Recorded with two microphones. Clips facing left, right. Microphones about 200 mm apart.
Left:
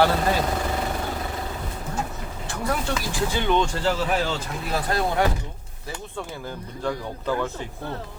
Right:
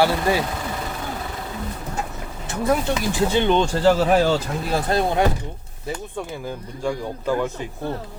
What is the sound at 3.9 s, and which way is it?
Speech, 40° right (ahead or behind).